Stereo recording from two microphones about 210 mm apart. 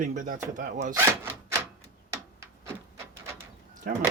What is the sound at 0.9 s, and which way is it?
Speech, 10° right (ahead or behind).